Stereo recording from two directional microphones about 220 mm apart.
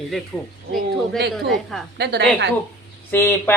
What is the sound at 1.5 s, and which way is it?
Speech, centre (ahead or behind).